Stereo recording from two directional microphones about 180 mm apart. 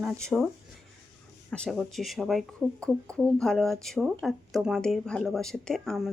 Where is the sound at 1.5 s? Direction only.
5° left (ahead or behind).